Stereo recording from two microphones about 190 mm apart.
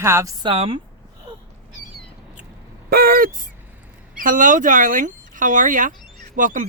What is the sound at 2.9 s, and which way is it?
Speech, 50° right (ahead or behind).